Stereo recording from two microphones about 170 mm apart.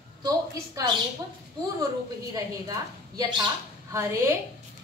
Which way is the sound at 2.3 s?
20° right (ahead or behind).